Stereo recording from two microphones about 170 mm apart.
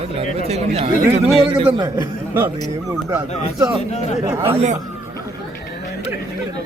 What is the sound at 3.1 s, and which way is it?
Speech, 15° right (ahead or behind).